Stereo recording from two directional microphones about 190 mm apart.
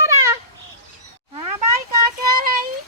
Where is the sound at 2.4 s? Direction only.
50° right (ahead or behind).